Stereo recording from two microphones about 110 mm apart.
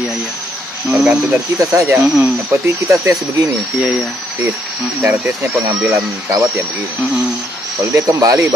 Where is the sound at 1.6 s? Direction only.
30° right (ahead or behind).